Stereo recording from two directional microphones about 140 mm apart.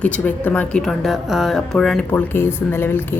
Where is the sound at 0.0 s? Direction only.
10° left (ahead or behind).